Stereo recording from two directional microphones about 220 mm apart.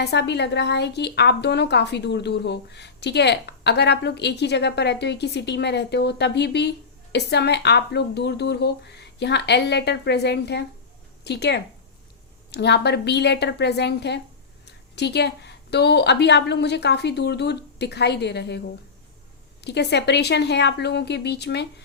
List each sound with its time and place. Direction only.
0.0 s a woman's voice: 50° left (ahead or behind)
19.6 s a woman's voice: 50° left (ahead or behind)